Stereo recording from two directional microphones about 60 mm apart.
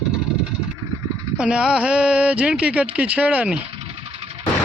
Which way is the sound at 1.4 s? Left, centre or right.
Centre.